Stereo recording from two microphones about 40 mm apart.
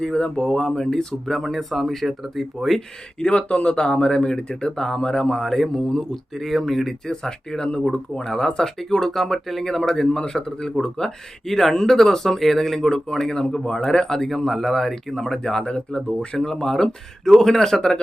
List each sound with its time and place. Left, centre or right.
0.0 s speech: left
1.2 s speech: centre
3.2 s speech: left; by 6.9 s centre
7.0 s speech: centre
15.6 s speech: left
16.5 s speech: centre